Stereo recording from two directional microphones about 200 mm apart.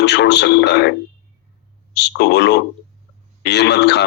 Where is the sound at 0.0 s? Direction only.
60° left (ahead or behind).